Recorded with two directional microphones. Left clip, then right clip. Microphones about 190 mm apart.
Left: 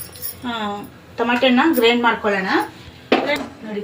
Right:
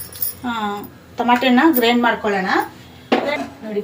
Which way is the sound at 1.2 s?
55° right (ahead or behind).